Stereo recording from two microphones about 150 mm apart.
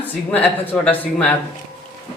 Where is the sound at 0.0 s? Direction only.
10° left (ahead or behind).